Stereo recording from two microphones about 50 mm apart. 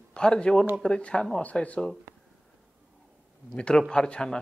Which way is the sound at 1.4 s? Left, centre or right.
Left.